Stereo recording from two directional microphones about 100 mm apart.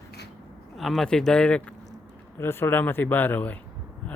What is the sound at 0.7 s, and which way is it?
Speech, centre (ahead or behind).